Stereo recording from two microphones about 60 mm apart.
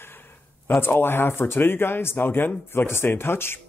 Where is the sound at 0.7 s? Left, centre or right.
Left.